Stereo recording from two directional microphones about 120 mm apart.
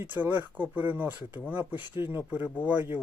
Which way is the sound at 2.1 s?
15° right (ahead or behind).